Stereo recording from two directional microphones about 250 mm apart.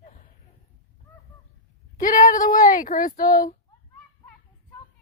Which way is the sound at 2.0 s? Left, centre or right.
Left.